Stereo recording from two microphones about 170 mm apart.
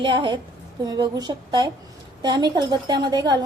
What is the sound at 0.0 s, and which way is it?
Speech, 30° right (ahead or behind).